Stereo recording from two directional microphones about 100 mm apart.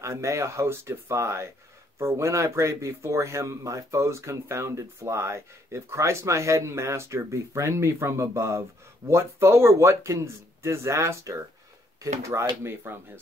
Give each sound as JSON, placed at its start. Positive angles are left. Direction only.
{"t": 0.0, "sound": "speech", "side_deg": -30}